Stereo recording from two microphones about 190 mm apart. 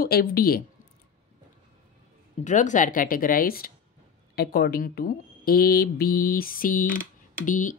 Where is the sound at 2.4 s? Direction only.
40° left (ahead or behind).